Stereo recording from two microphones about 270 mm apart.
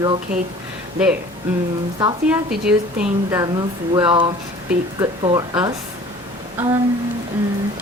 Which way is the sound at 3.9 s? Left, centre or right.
Centre.